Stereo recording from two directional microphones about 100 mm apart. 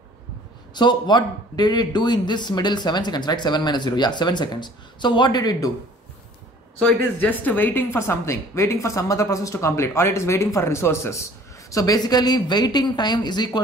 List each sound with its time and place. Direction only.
0.7 s a man's voice: 45° left (ahead or behind)
6.8 s a woman's voice: 15° left (ahead or behind)
11.7 s a man's voice: 40° left (ahead or behind)